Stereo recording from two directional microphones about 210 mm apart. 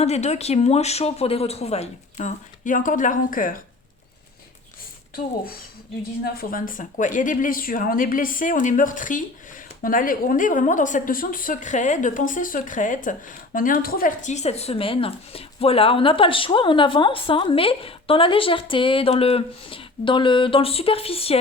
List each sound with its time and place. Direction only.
0.0 s speech: 30° left (ahead or behind)
6.2 s a woman's voice: 45° left (ahead or behind); by 21.3 s 25° left (ahead or behind)